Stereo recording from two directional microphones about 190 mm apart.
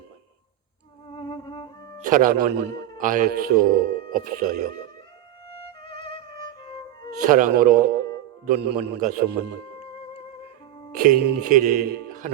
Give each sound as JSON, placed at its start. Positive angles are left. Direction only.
{"t": 1.1, "sound": "violin", "side_deg": 25}
{"t": 2.0, "sound": "a man's voice", "side_deg": -45}
{"t": 5.8, "sound": "music", "side_deg": 25}
{"t": 7.2, "sound": "a man's voice", "side_deg": -45}
{"t": 10.9, "sound": "a man's voice", "side_deg": -45}